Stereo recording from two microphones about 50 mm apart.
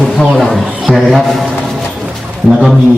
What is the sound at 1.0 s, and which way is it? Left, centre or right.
Speech, centre.